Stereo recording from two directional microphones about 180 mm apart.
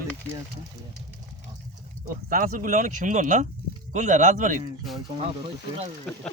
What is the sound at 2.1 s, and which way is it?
Speech, 50° right (ahead or behind).